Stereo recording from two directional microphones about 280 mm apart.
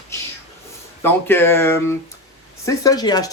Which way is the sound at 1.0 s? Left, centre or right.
Centre.